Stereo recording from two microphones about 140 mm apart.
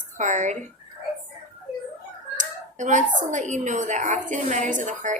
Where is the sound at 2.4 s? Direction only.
60° right (ahead or behind).